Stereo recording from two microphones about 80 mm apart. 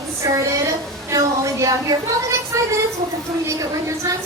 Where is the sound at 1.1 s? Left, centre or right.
Right.